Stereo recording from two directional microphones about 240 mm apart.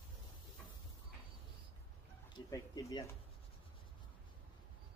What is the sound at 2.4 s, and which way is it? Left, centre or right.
Speech, centre.